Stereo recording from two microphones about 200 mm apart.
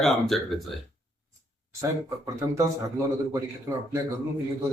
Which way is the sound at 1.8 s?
15° right (ahead or behind).